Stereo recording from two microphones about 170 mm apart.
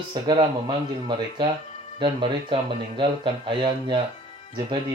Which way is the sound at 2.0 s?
30° right (ahead or behind).